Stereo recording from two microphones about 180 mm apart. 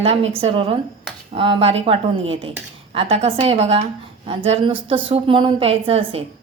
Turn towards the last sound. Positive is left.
turn(degrees=-30)  # may be behind; listen again after turning